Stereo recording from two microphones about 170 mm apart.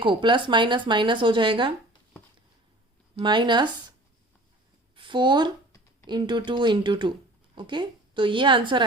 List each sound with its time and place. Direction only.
0.0 s speech: 30° right (ahead or behind)
3.2 s speech: 25° right (ahead or behind)
4.9 s speech: 30° right (ahead or behind)